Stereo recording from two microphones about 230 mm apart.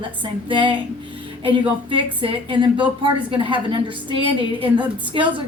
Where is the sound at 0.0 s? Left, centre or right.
Right.